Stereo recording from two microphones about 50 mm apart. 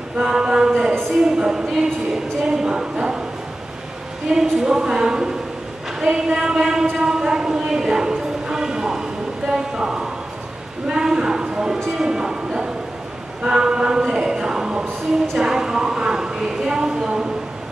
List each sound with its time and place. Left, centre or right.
0.2 s a sound: centre
2.4 s a woman's voice: centre
4.4 s a woman's voice: centre